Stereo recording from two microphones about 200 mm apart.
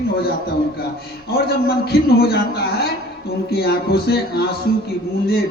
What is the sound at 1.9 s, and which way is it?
A man's voice, 50° left (ahead or behind).